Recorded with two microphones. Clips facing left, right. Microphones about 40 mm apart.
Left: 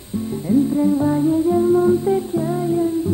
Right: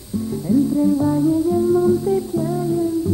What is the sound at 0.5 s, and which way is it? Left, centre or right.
Music, left.